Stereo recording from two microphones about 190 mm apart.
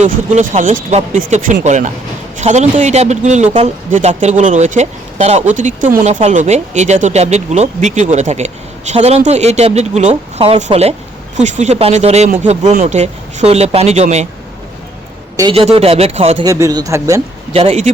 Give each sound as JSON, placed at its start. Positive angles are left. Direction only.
{"t": 0.0, "sound": "speech", "side_deg": -35}
{"t": 15.4, "sound": "speech", "side_deg": -25}
{"t": 16.5, "sound": "speech", "side_deg": -20}
{"t": 17.5, "sound": "speech", "side_deg": -30}